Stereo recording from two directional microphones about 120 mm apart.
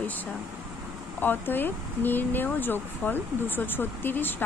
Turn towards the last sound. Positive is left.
turn(degrees=15)  # may be behind; listen again after turning